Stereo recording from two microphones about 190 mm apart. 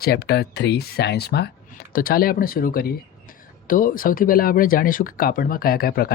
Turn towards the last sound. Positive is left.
turn(degrees=55)  # may be behind; listen again after turning